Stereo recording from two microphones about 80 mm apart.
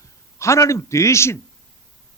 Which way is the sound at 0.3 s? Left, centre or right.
Left.